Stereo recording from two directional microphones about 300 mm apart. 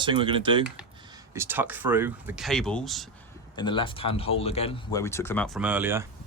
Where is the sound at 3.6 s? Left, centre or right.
Centre.